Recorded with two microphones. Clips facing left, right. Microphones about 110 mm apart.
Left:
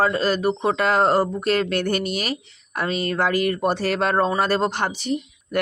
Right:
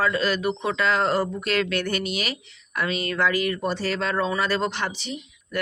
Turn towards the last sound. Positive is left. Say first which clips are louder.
# left 8 dB
turn(degrees=45)  # may be behind; listen again after turning